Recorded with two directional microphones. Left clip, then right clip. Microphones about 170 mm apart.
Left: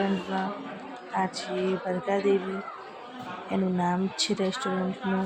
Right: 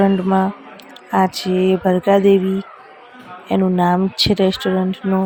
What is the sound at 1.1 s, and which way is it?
A woman's voice, 50° right (ahead or behind).